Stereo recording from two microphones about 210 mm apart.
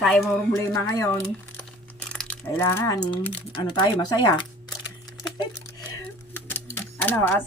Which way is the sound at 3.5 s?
20° left (ahead or behind).